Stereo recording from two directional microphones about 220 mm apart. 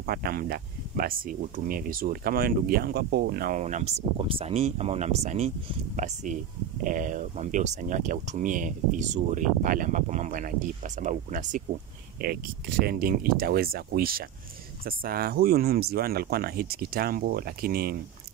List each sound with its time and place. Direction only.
0.0 s speech: 45° right (ahead or behind)